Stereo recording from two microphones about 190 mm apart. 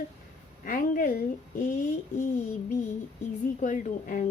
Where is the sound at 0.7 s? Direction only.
45° left (ahead or behind).